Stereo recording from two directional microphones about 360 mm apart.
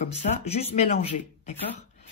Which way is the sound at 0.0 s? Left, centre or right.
Centre.